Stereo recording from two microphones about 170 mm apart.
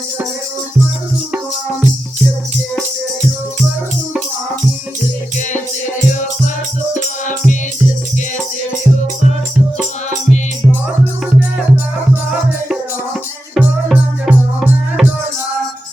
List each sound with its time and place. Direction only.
6.9 s music: 50° left (ahead or behind)
13.5 s music: 5° right (ahead or behind)